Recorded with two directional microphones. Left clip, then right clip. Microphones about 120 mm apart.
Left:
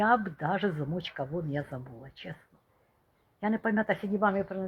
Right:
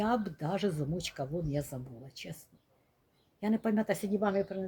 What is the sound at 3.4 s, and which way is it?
Speech, 15° right (ahead or behind).